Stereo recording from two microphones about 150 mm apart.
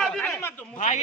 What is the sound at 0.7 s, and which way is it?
Speech, 55° left (ahead or behind).